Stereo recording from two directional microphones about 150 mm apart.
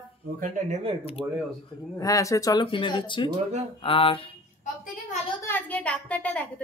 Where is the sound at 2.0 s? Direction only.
20° left (ahead or behind); by 4.3 s 35° left (ahead or behind).